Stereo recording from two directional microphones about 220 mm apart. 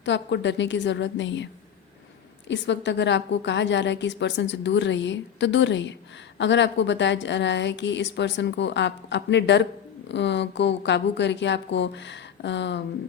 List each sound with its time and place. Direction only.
0.0 s a woman's voice: 55° left (ahead or behind)
2.5 s a woman's voice: 55° left (ahead or behind)